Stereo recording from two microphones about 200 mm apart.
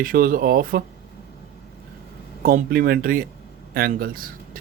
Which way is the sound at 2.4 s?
45° right (ahead or behind).